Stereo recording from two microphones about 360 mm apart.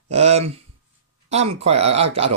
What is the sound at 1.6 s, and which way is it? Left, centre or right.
Speech, centre.